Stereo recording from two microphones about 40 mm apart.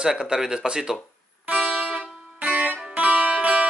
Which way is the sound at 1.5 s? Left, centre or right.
Right.